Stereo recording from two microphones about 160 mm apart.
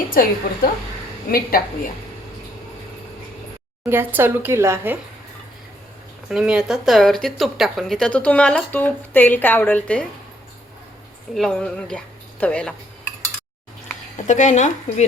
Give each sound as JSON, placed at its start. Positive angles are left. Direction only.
{"t": 0.1, "sound": "a woman's voice", "side_deg": 60}
{"t": 3.8, "sound": "a woman's voice", "side_deg": -15}
{"t": 6.2, "sound": "a woman's voice", "side_deg": -5}
{"t": 11.3, "sound": "a woman's voice", "side_deg": 5}
{"t": 14.3, "sound": "speech", "side_deg": 50}